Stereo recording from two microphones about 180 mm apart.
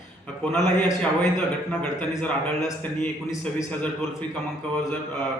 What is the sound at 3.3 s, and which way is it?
Speech, 20° left (ahead or behind).